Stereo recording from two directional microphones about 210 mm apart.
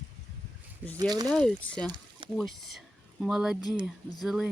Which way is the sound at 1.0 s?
20° right (ahead or behind).